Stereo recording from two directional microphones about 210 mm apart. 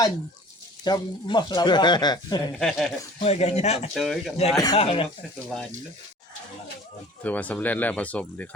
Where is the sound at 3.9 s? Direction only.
Centre (ahead or behind).